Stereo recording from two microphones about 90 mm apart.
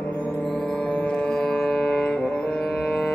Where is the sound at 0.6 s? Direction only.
10° left (ahead or behind).